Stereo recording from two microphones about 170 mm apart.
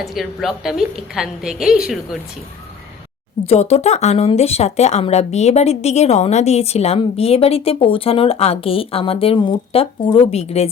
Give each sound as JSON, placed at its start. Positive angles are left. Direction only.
{"t": 0.0, "sound": "a woman's voice", "side_deg": 0}
{"t": 3.4, "sound": "speech", "side_deg": 40}